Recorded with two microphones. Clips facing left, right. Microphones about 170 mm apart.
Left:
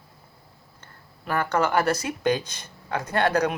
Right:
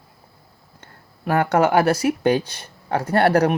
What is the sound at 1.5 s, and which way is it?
Speech, 45° right (ahead or behind).